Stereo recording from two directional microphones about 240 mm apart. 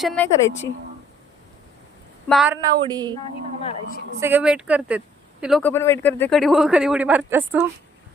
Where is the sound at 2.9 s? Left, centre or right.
Centre.